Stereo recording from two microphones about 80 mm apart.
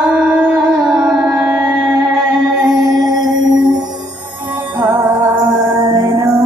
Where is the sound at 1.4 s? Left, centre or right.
Centre.